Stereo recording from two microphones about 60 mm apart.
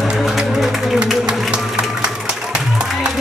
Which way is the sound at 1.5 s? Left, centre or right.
Centre.